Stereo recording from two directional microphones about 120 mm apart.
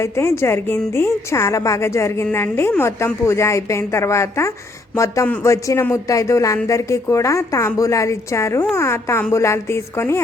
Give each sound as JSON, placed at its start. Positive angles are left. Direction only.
{"t": 0.0, "sound": "a woman's voice", "side_deg": 20}